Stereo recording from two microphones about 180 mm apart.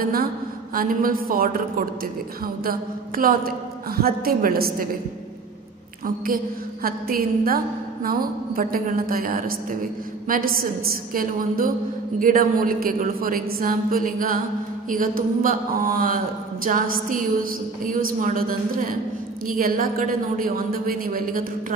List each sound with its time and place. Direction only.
0.0 s a woman's voice: 55° right (ahead or behind)
6.0 s a woman's voice: 50° right (ahead or behind)